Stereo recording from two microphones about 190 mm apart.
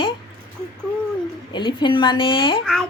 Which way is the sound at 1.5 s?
25° left (ahead or behind).